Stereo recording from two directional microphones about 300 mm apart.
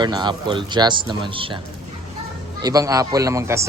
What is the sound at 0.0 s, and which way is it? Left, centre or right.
Speech, centre.